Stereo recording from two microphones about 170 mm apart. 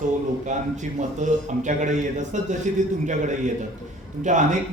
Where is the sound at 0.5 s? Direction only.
45° right (ahead or behind).